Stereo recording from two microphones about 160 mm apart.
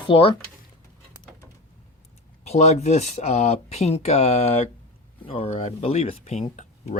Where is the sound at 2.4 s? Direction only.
45° left (ahead or behind).